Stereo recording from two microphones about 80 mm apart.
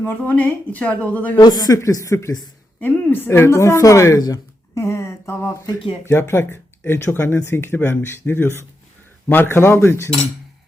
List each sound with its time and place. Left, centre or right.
0.0 s speech: left
1.4 s speech: left
2.8 s a woman's voice: left
4.2 s a sound: left
4.8 s speech: left